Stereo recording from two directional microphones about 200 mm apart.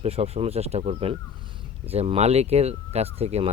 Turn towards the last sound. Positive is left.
turn(degrees=-30)  # may be behind; listen again after turning